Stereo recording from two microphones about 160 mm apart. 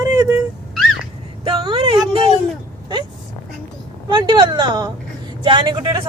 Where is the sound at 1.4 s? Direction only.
35° right (ahead or behind).